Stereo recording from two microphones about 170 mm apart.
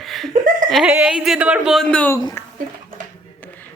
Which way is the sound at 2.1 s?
20° left (ahead or behind).